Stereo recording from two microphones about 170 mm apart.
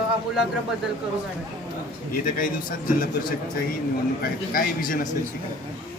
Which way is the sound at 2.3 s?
55° left (ahead or behind).